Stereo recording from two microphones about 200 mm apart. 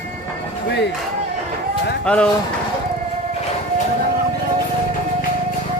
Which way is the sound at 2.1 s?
5° left (ahead or behind).